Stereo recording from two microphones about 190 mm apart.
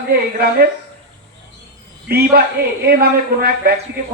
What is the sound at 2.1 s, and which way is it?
A man's voice, 55° right (ahead or behind).